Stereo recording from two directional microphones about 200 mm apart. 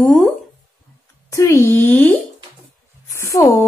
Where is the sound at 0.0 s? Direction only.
Centre (ahead or behind).